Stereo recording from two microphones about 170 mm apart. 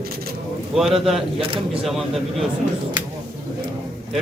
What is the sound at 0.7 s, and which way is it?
Speech, centre (ahead or behind).